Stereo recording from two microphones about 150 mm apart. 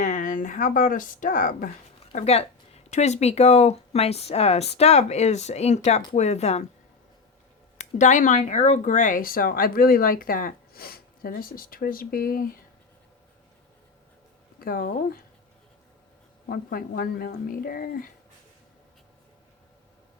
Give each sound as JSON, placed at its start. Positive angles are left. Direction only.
{"t": 0.0, "sound": "speech", "side_deg": 60}
{"t": 2.1, "sound": "speech", "side_deg": 45}
{"t": 7.8, "sound": "speech", "side_deg": 55}
{"t": 14.6, "sound": "speech", "side_deg": 70}
{"t": 16.5, "sound": "speech", "side_deg": 75}